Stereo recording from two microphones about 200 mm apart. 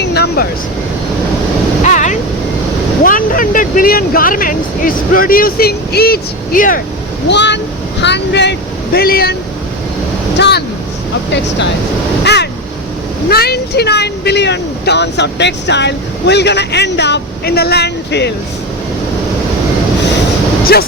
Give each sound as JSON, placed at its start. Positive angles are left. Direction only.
{"t": 0.0, "sound": "vehicle", "side_deg": 55}
{"t": 1.8, "sound": "a sound", "side_deg": 40}
{"t": 3.0, "sound": "speech", "side_deg": 45}
{"t": 7.3, "sound": "speech", "side_deg": 60}
{"t": 10.3, "sound": "speech", "side_deg": 60}
{"t": 12.2, "sound": "a sound", "side_deg": 55}
{"t": 13.2, "sound": "speech", "side_deg": 50}